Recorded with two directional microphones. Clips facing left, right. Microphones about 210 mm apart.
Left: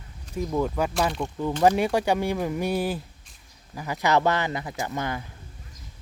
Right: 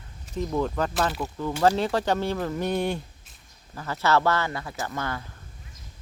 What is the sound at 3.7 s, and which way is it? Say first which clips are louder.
Speech: left 1 dB; 15° left (ahead or behind).